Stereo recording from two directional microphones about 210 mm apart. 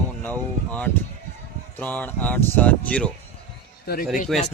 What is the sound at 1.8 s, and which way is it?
Speech, 5° left (ahead or behind).